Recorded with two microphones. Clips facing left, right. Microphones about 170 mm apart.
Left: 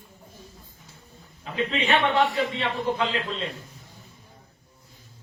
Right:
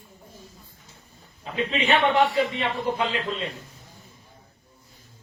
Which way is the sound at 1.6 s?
10° right (ahead or behind).